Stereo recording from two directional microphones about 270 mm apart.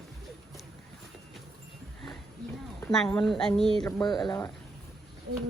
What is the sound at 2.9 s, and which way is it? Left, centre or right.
Speech, centre.